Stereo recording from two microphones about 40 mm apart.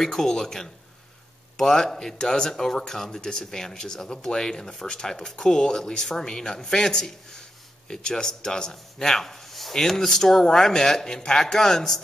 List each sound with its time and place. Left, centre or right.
0.0 s speech: centre